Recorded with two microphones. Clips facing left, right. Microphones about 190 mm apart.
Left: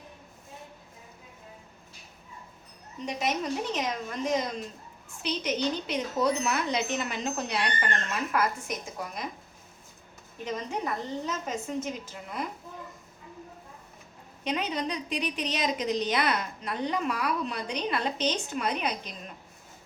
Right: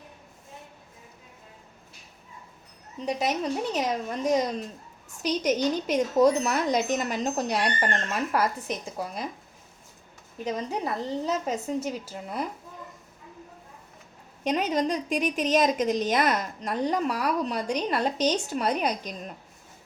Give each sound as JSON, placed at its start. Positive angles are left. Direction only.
{"t": 3.1, "sound": "a woman's voice", "side_deg": -35}
{"t": 10.4, "sound": "a woman's voice", "side_deg": -35}
{"t": 14.4, "sound": "a woman's voice", "side_deg": -45}